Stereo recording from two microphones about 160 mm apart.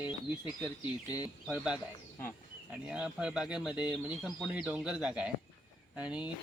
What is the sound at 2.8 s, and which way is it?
Speech, 5° right (ahead or behind).